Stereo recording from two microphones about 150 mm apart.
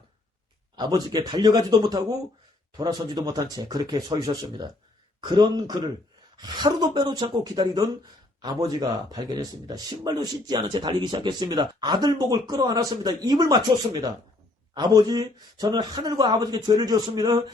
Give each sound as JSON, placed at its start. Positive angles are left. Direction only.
{"t": 0.8, "sound": "speech", "side_deg": -25}